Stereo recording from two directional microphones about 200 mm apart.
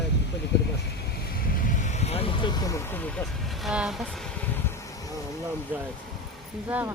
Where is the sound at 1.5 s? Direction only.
35° left (ahead or behind); by 3.0 s 15° left (ahead or behind).